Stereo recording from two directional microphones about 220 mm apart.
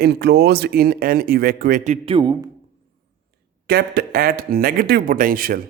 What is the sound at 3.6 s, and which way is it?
A man's voice, 45° right (ahead or behind).